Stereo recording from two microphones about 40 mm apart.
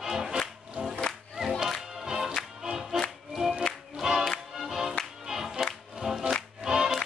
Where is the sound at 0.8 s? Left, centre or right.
Right.